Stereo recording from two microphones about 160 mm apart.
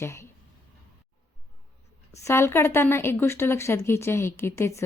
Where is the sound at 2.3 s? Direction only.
15° left (ahead or behind).